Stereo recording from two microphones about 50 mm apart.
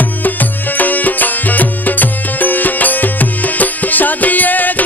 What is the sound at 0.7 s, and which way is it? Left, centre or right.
Music, left.